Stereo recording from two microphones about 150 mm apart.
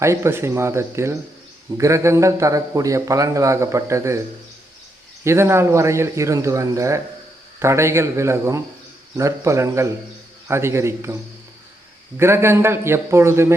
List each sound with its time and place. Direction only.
0.0 s a man's voice: 20° right (ahead or behind)
5.2 s a man's voice: 15° right (ahead or behind)